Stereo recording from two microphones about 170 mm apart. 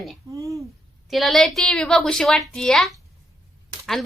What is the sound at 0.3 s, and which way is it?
Speech, 20° right (ahead or behind).